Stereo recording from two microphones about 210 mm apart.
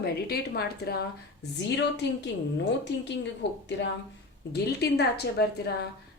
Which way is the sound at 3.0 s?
55° left (ahead or behind).